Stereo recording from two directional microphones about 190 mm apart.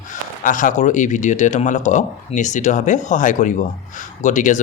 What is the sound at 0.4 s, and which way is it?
Speech, 40° left (ahead or behind).